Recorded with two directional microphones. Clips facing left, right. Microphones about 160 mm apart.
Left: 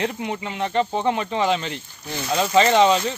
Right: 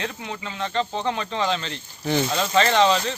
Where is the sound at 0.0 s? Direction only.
20° left (ahead or behind).